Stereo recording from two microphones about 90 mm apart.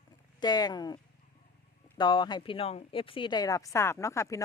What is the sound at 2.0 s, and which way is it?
Speech, 60° left (ahead or behind).